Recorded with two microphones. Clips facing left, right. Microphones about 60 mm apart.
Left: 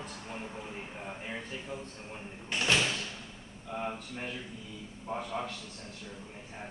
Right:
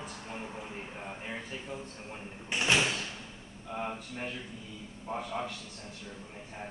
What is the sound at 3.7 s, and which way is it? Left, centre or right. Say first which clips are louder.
Speech: even; centre.